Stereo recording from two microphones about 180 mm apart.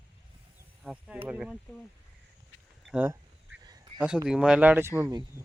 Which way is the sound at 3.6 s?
25° right (ahead or behind).